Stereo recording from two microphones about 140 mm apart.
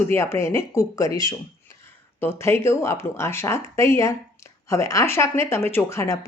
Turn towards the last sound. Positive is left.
turn(degrees=20)  # may be behind; listen again after turning